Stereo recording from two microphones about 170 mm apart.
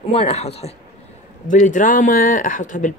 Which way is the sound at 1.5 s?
50° left (ahead or behind).